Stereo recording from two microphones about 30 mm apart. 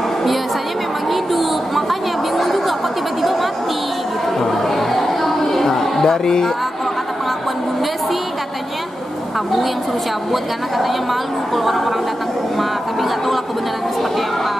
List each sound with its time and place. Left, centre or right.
1.9 s chatter: centre
4.9 s a sound: centre
6.0 s speech: centre